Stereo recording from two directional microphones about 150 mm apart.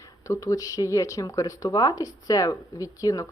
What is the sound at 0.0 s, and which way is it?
Speech, 20° left (ahead or behind).